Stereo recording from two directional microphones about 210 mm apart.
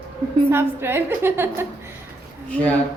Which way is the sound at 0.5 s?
10° right (ahead or behind).